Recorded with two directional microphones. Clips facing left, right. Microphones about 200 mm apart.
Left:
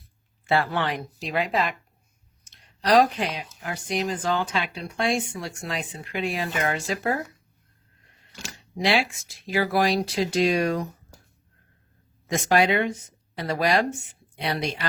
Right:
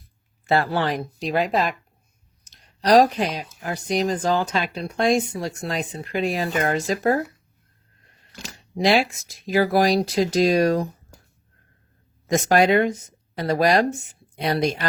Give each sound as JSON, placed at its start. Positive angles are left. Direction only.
{"t": 0.4, "sound": "speech", "side_deg": -40}
{"t": 8.7, "sound": "speech", "side_deg": -40}
{"t": 12.3, "sound": "speech", "side_deg": -45}